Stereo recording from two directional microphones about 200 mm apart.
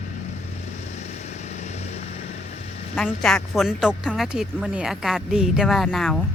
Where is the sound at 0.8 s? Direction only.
35° left (ahead or behind).